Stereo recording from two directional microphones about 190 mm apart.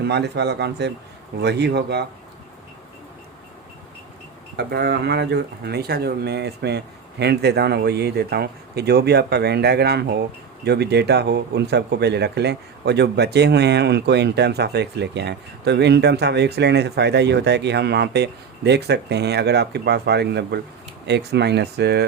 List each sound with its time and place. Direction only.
0.0 s speech: 60° right (ahead or behind)
4.5 s speech: 60° right (ahead or behind)